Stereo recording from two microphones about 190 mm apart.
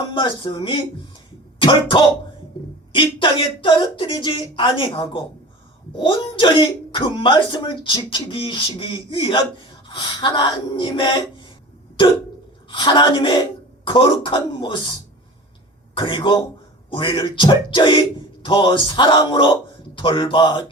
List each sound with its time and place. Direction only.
0.1 s speech: 25° left (ahead or behind)
12.7 s speech: 25° left (ahead or behind)
16.0 s speech: 25° left (ahead or behind)